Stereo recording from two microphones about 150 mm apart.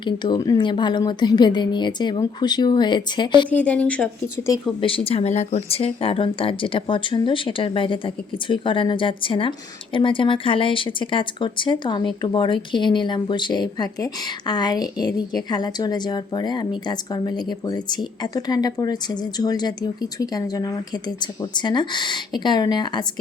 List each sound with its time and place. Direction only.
0.0 s speech: 30° left (ahead or behind)
3.5 s speech: 10° left (ahead or behind)
4.8 s speech: 35° left (ahead or behind)